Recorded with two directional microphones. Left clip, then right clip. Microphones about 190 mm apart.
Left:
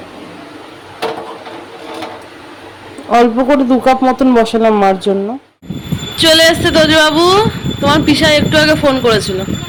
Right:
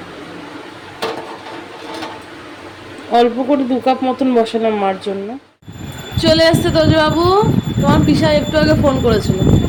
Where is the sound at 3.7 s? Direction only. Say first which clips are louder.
Left 5 dB; 25° left (ahead or behind).